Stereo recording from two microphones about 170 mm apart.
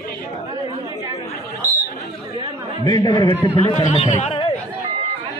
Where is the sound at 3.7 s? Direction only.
45° left (ahead or behind).